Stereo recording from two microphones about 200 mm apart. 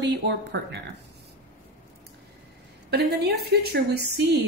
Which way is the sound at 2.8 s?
55° right (ahead or behind).